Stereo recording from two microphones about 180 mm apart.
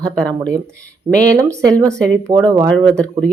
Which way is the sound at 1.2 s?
15° right (ahead or behind).